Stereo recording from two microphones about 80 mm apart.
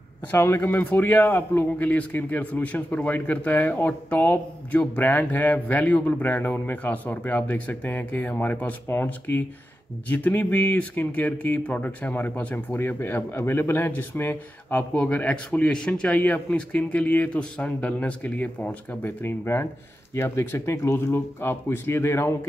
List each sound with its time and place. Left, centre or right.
0.3 s speech: left